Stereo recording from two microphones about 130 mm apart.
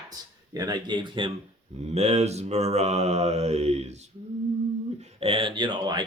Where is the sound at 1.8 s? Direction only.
55° right (ahead or behind).